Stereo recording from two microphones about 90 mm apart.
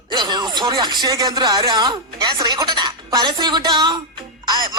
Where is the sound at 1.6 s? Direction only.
65° right (ahead or behind).